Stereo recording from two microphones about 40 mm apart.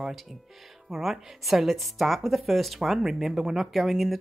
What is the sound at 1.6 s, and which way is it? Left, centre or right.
Speech, centre.